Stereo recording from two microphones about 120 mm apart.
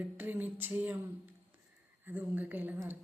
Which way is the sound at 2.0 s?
15° right (ahead or behind).